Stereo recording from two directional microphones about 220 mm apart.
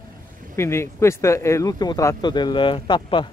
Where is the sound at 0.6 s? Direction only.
10° left (ahead or behind).